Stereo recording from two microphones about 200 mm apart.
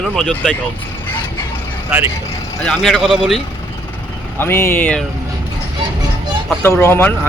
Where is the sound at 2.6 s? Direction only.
Centre (ahead or behind).